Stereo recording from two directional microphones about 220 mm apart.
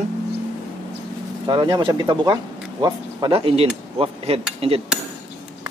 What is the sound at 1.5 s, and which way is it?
Speech, 20° right (ahead or behind).